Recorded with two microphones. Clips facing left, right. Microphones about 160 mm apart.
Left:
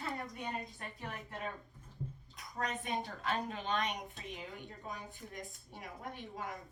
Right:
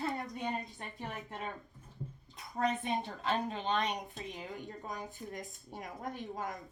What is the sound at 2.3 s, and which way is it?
A woman's voice, 30° right (ahead or behind).